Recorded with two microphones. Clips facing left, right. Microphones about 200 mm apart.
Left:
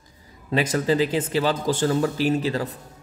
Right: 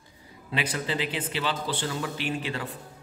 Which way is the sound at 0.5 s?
40° left (ahead or behind).